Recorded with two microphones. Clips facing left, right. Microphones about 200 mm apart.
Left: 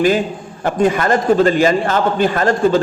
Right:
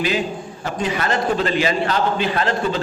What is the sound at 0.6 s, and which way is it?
A man's voice, 50° left (ahead or behind).